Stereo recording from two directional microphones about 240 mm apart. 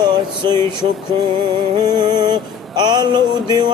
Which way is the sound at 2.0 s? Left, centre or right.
Centre.